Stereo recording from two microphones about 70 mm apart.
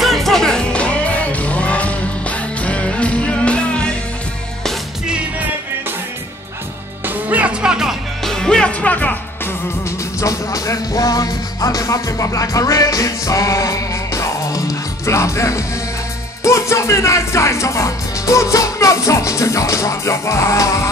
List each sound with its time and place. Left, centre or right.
0.0 s music: centre
7.1 s music: right
8.2 s music: centre
8.8 s music: left
9.8 s music: left
16.4 s speech: left